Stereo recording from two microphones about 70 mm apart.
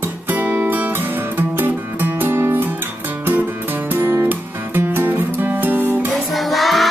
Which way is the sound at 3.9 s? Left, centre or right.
Right.